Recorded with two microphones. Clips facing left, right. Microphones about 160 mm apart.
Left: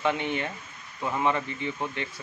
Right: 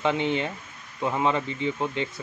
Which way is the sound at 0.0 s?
20° right (ahead or behind).